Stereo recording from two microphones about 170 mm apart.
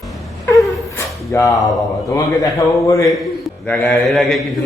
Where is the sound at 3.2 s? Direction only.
Centre (ahead or behind).